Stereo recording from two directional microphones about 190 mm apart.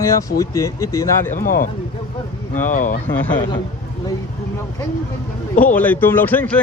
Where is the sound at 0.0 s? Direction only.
15° left (ahead or behind).